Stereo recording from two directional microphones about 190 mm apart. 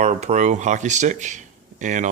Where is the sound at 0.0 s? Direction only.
40° right (ahead or behind).